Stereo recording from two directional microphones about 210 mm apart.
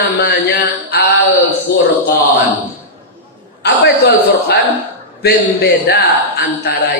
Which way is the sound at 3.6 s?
50° left (ahead or behind).